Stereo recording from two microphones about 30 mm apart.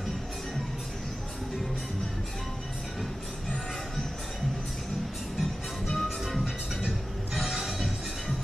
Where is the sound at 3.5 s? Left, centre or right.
Centre.